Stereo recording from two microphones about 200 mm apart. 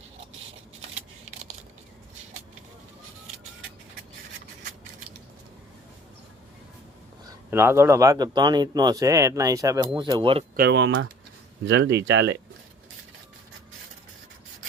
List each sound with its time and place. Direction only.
0.8 s a sound: 90° right
7.5 s speech: 10° right (ahead or behind)
10.6 s speech: 60° right (ahead or behind)